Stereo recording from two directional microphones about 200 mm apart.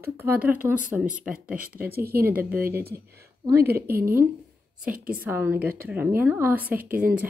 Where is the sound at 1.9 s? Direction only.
50° right (ahead or behind).